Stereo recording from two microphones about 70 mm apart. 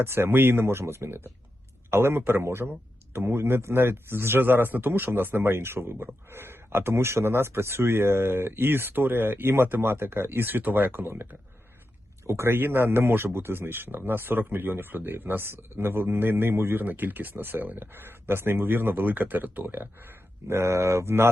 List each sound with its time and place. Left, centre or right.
0.0 s speech: right